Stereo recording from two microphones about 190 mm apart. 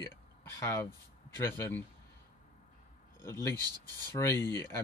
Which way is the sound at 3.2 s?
15° left (ahead or behind).